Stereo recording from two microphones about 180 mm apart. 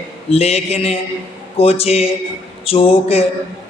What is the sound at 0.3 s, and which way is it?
A man's voice, 35° left (ahead or behind).